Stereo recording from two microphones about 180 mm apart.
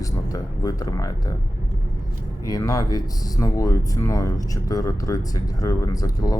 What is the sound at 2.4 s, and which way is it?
Speech, 20° left (ahead or behind).